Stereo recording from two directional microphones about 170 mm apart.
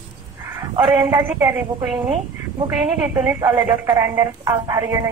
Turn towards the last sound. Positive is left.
turn(degrees=-20)  # may be behind; listen again after turning